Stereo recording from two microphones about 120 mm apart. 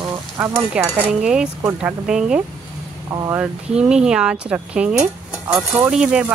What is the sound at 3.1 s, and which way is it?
Speech, 30° right (ahead or behind).